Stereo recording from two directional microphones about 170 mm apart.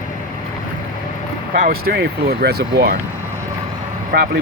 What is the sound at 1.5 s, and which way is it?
Speech, 55° right (ahead or behind).